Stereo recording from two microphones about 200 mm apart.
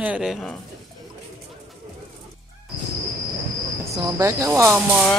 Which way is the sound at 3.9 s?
20° right (ahead or behind).